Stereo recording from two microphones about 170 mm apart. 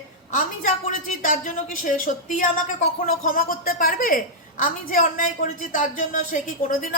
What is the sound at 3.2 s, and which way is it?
A woman's voice, 55° left (ahead or behind).